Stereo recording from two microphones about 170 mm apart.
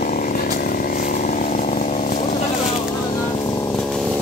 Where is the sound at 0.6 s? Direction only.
60° left (ahead or behind).